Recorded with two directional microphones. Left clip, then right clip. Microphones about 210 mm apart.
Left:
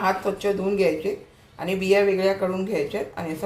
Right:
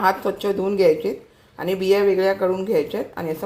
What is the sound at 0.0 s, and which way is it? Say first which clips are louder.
Speech: right 3 dB; 35° right (ahead or behind).